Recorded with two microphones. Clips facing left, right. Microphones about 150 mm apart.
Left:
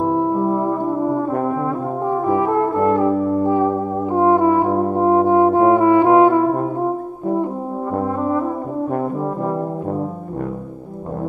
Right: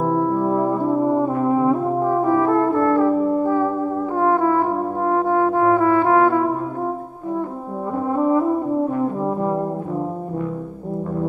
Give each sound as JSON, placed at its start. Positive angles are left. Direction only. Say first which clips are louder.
{"t": 0.0, "sound": "music", "louder": "left 1 dB", "side_deg": 20}
{"t": 2.2, "sound": "brass instrument", "louder": "left 1 dB", "side_deg": 20}